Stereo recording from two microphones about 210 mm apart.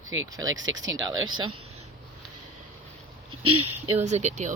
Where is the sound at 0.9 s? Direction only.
20° right (ahead or behind).